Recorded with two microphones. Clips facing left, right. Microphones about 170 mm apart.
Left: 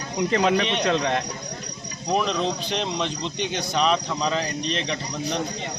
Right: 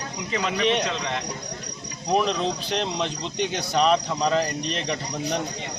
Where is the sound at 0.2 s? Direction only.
50° left (ahead or behind).